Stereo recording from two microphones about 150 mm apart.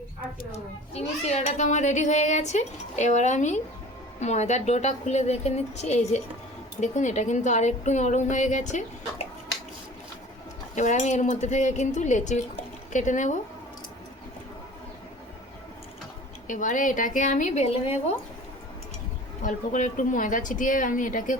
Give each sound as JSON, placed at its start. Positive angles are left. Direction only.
{"t": 0.5, "sound": "a child's voice", "side_deg": 45}
{"t": 10.8, "sound": "a child's voice", "side_deg": 55}
{"t": 16.5, "sound": "a woman's voice", "side_deg": 60}
{"t": 19.4, "sound": "a woman's voice", "side_deg": 60}